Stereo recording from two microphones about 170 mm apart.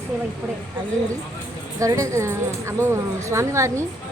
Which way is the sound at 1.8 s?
20° right (ahead or behind).